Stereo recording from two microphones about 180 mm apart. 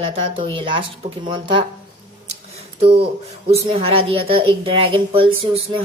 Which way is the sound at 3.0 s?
35° right (ahead or behind).